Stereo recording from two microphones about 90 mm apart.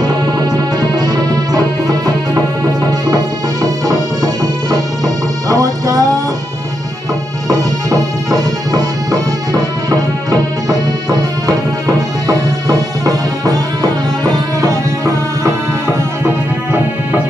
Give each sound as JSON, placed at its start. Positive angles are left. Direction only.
{"t": 0.0, "sound": "music", "side_deg": -50}
{"t": 3.6, "sound": "music", "side_deg": -40}
{"t": 7.4, "sound": "music", "side_deg": -40}